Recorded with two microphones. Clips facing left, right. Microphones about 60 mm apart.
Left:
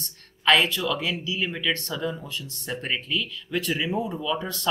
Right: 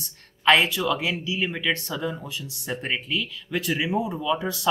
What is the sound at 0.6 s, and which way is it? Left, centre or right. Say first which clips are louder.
Speech: right 1 dB; centre.